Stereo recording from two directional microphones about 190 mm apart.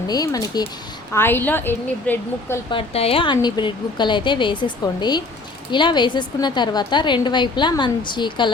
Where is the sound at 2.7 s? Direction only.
30° left (ahead or behind).